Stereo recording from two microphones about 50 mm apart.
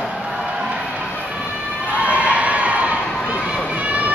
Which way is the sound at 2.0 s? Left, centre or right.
Right.